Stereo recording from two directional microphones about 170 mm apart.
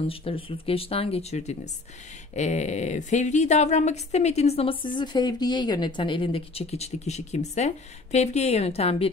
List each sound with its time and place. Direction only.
0.0 s a woman's voice: 35° left (ahead or behind)
4.9 s speech: 25° left (ahead or behind)